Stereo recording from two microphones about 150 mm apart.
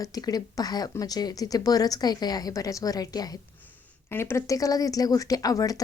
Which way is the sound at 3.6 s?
15° left (ahead or behind).